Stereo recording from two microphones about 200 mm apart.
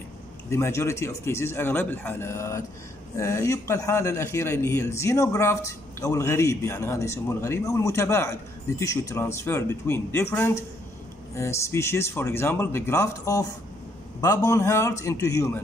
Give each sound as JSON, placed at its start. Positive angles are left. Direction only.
{"t": 0.5, "sound": "a man's voice", "side_deg": 15}